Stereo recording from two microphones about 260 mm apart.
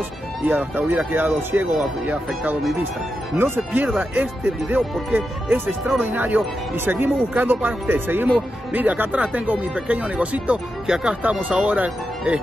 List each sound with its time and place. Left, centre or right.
0.5 s speech: centre